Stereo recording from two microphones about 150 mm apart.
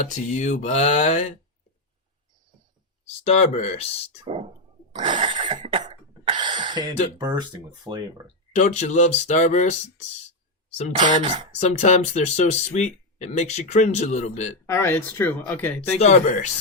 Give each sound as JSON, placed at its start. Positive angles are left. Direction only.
{"t": 0.0, "sound": "speech", "side_deg": 55}
{"t": 3.2, "sound": "speech", "side_deg": 45}
{"t": 4.3, "sound": "a sound", "side_deg": -40}
{"t": 5.6, "sound": "cough", "side_deg": -35}
{"t": 6.6, "sound": "a sound", "side_deg": -30}
{"t": 7.2, "sound": "speech", "side_deg": -25}
{"t": 8.5, "sound": "speech", "side_deg": 50}
{"t": 11.2, "sound": "speech", "side_deg": -30}
{"t": 11.6, "sound": "speech", "side_deg": 50}
{"t": 14.7, "sound": "speech", "side_deg": 15}
{"t": 16.0, "sound": "speech", "side_deg": 50}